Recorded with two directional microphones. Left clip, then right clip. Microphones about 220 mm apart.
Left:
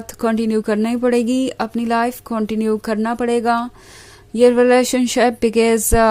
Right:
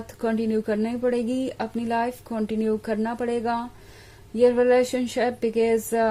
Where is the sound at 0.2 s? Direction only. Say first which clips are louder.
Left 6 dB; 25° left (ahead or behind).